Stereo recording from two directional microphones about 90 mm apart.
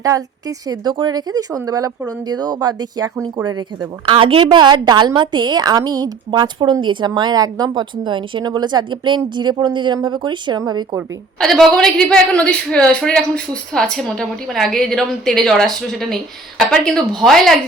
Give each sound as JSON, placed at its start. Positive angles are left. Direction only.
{"t": 0.0, "sound": "speech", "side_deg": -40}
{"t": 4.0, "sound": "speech", "side_deg": -80}
{"t": 7.7, "sound": "speech", "side_deg": -65}
{"t": 11.3, "sound": "a woman's voice", "side_deg": 5}